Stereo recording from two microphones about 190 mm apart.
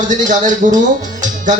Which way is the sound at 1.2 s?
40° right (ahead or behind).